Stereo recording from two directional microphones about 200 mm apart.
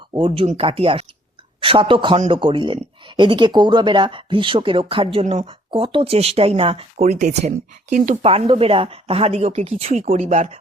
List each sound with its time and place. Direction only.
0.1 s speech: 25° right (ahead or behind)